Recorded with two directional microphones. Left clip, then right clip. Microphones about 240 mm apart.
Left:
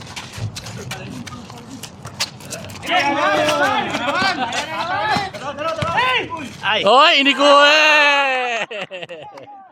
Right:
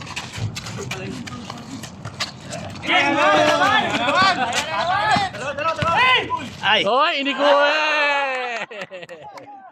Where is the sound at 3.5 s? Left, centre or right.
Right.